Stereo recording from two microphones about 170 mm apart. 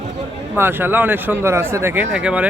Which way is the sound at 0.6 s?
10° right (ahead or behind).